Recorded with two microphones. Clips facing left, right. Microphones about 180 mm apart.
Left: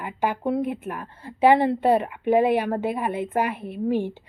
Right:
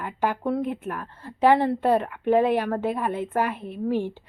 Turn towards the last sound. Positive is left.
turn(degrees=15)  # may be behind; listen again after turning